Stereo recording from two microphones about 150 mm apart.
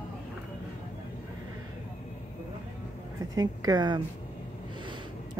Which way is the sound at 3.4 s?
25° right (ahead or behind).